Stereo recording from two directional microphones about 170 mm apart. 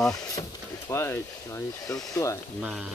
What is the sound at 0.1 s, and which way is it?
Speech, 20° left (ahead or behind).